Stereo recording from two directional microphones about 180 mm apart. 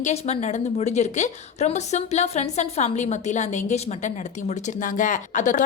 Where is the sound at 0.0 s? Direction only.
40° left (ahead or behind).